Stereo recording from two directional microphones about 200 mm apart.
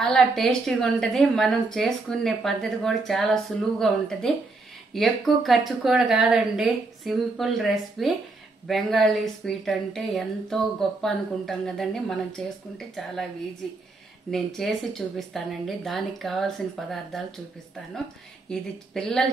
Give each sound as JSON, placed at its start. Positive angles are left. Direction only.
{"t": 0.0, "sound": "a woman's voice", "side_deg": 5}
{"t": 14.3, "sound": "a woman's voice", "side_deg": 0}
{"t": 18.5, "sound": "a woman's voice", "side_deg": 5}